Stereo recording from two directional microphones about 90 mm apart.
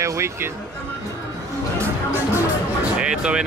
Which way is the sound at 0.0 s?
30° right (ahead or behind).